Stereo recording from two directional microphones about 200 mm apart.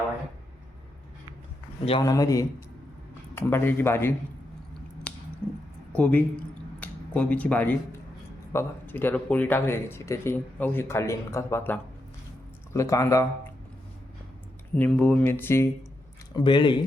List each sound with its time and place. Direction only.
1.8 s speech: 25° left (ahead or behind)
5.9 s speech: 5° left (ahead or behind)
14.8 s speech: 5° left (ahead or behind)
16.3 s speech: 25° left (ahead or behind)